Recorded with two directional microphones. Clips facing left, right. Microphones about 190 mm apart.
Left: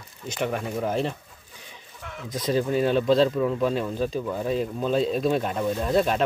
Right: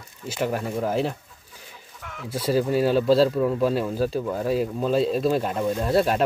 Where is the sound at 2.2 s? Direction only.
5° right (ahead or behind).